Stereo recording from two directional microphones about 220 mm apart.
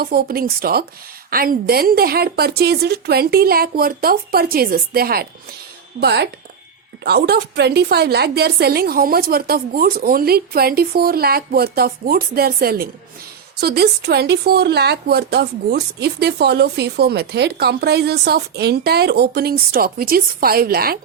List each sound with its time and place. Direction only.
0.0 s speech: 45° right (ahead or behind)